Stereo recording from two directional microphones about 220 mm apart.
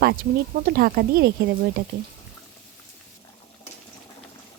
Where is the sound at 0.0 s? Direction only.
45° right (ahead or behind).